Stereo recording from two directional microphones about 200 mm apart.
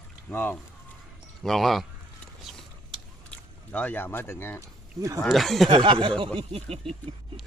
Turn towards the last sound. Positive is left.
turn(degrees=-25)  # may be behind; listen again after turning